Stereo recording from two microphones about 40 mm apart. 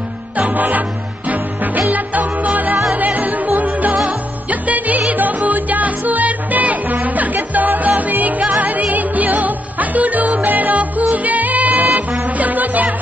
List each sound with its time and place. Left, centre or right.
0.4 s music: right